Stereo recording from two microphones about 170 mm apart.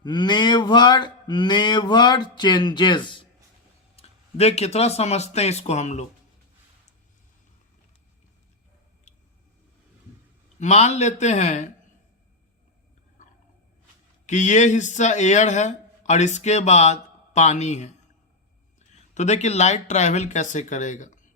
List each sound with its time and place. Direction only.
0.0 s speech: 25° left (ahead or behind); by 6.1 s 40° left (ahead or behind)
10.6 s speech: 40° left (ahead or behind)
14.3 s speech: 45° left (ahead or behind)
19.1 s speech: 40° left (ahead or behind)